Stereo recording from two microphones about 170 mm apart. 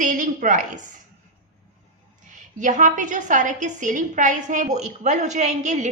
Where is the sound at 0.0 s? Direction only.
50° right (ahead or behind).